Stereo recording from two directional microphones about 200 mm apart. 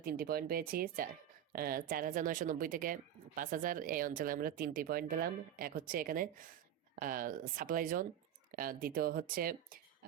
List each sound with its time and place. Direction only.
0.0 s speech: 50° right (ahead or behind)